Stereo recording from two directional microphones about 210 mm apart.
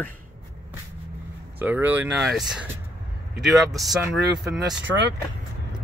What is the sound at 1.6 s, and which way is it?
Speech, 10° right (ahead or behind).